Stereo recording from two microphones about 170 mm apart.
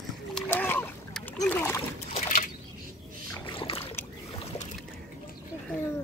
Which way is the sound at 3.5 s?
30° left (ahead or behind).